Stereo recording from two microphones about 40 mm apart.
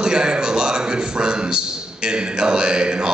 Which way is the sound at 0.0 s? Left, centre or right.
Centre.